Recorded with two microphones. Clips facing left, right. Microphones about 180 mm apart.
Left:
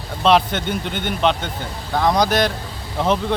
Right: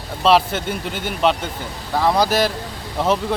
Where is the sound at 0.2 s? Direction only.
Centre (ahead or behind).